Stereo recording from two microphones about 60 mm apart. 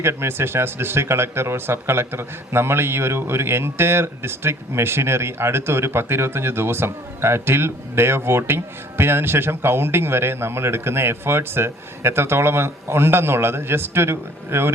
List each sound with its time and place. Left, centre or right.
0.0 s speech: right